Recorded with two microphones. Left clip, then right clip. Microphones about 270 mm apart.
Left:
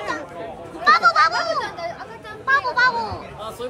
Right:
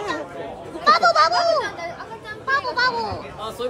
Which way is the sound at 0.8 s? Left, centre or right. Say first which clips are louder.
Left 1 dB; centre.